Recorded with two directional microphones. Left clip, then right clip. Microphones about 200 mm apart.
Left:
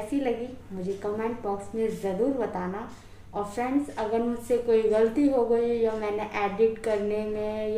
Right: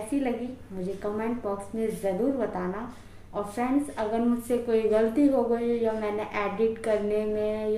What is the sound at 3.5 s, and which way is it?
A woman's voice, centre (ahead or behind).